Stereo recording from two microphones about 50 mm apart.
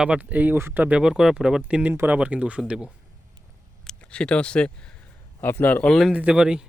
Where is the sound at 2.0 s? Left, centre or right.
Right.